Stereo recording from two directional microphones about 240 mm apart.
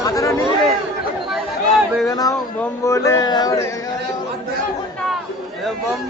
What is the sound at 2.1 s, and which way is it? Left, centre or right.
Speech, centre.